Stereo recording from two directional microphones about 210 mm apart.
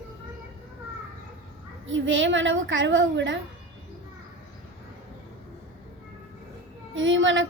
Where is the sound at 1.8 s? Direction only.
65° right (ahead or behind).